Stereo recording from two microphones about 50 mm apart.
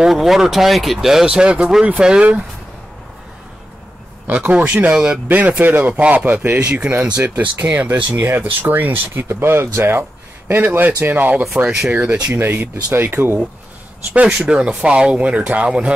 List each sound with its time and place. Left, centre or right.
0.1 s speech: centre
1.2 s speech: right
4.3 s speech: right
5.3 s speech: right
7.2 s speech: right
9.3 s speech: right
12.4 s speech: right
14.2 s speech: centre